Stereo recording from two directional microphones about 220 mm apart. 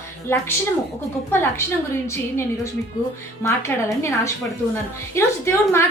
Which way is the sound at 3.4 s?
10° left (ahead or behind).